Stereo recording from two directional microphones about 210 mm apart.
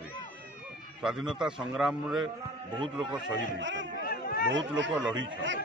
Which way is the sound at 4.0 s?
45° left (ahead or behind).